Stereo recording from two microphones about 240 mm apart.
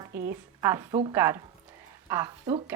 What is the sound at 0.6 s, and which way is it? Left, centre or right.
Speech, centre.